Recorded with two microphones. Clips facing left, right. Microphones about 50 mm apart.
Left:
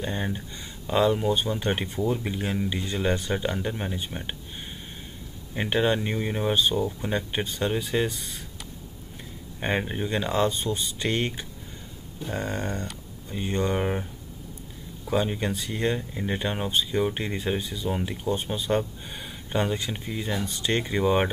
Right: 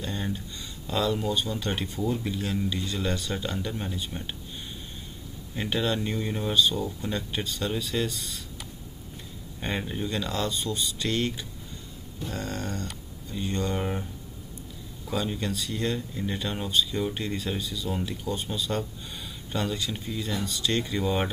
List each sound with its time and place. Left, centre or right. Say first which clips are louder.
0.0 s speech: left 2 dB; left
5.5 s speech: left 4 dB; left
9.6 s speech: left 4 dB; left
15.0 s speech: left 4 dB; left